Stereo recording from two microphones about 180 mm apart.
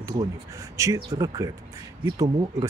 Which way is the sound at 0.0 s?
15° right (ahead or behind).